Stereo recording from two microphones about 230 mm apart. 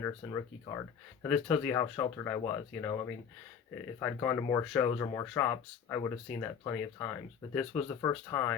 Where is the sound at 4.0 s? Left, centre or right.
Centre.